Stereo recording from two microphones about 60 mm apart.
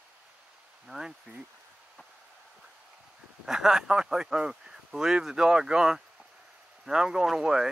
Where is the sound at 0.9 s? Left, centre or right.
Centre.